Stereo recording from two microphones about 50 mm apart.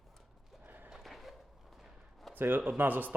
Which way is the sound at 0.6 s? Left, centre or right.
Right.